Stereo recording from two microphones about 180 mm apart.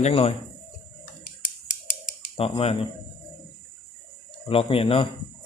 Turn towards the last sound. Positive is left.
turn(degrees=30)  # may be behind; listen again after turning